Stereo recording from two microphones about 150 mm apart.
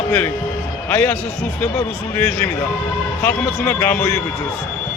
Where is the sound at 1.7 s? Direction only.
15° left (ahead or behind).